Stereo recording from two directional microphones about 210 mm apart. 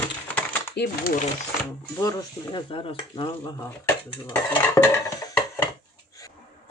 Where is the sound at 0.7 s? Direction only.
50° left (ahead or behind).